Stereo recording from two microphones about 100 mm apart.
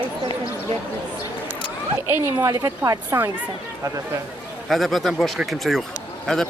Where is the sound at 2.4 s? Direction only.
35° right (ahead or behind).